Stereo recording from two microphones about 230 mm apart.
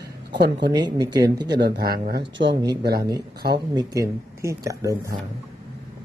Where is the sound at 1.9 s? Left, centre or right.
Right.